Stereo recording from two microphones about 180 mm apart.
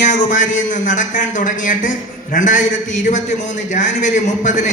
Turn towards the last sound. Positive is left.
turn(degrees=45)  # may be behind; listen again after turning